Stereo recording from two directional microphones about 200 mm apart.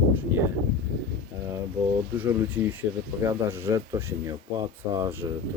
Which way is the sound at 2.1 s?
10° right (ahead or behind).